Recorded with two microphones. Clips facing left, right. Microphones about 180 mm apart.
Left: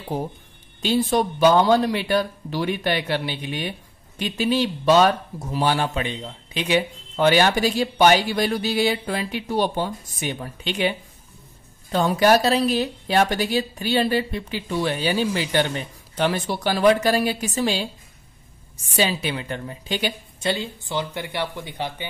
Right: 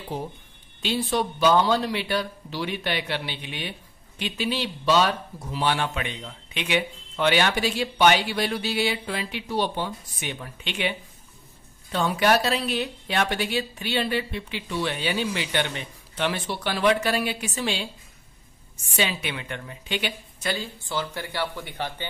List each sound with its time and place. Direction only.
0.8 s a woman's voice: 45° left (ahead or behind)
18.9 s a woman's voice: 35° left (ahead or behind)
20.4 s speech: 20° left (ahead or behind)